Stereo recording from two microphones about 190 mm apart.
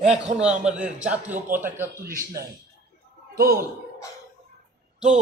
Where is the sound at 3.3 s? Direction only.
50° right (ahead or behind).